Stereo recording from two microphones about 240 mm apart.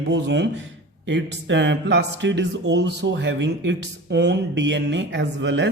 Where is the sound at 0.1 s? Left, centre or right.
Right.